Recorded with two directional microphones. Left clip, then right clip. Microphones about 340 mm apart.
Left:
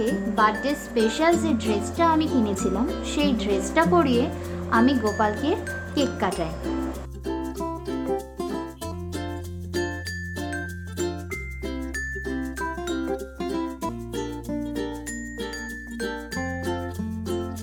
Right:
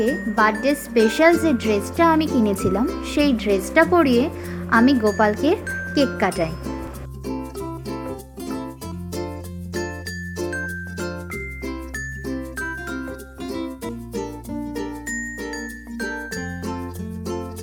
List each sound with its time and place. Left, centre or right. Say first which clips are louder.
0.0 s speech: right 3 dB; centre